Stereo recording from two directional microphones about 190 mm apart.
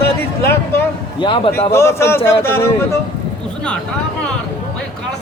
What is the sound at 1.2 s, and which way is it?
Speech, 25° left (ahead or behind).